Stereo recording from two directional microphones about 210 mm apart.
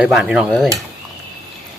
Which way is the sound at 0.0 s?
5° right (ahead or behind).